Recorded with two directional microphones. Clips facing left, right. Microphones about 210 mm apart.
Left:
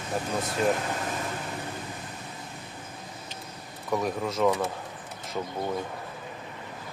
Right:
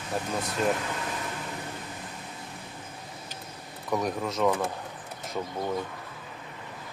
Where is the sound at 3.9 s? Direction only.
Centre (ahead or behind).